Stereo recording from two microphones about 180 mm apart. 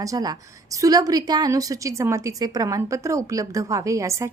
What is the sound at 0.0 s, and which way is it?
A woman's voice, 20° right (ahead or behind).